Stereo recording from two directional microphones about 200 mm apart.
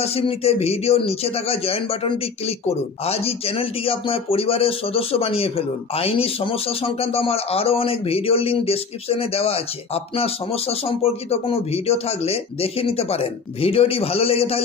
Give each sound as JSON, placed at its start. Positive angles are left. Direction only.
{"t": 0.0, "sound": "speech", "side_deg": 30}